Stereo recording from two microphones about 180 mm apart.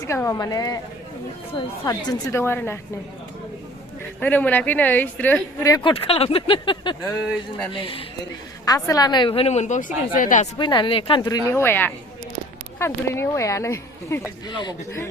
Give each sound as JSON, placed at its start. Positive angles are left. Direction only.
{"t": 0.0, "sound": "speech", "side_deg": 15}
{"t": 1.8, "sound": "speech", "side_deg": 15}
{"t": 4.2, "sound": "speech", "side_deg": 10}
{"t": 10.6, "sound": "speech", "side_deg": 25}